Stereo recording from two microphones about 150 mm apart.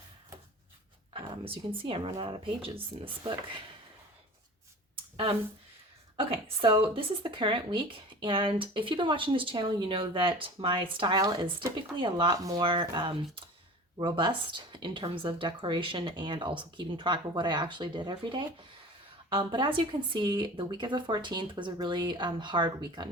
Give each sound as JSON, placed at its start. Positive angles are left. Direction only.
{"t": 1.1, "sound": "speech", "side_deg": -35}
{"t": 6.1, "sound": "speech", "side_deg": -40}